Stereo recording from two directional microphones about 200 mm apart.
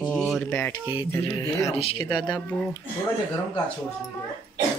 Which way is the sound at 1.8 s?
25° left (ahead or behind).